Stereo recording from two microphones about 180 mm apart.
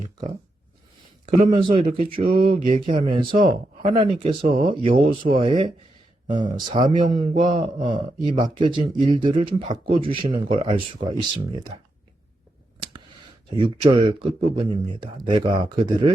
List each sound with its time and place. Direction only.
1.5 s a man's voice: 25° right (ahead or behind)
13.6 s a man's voice: 30° right (ahead or behind)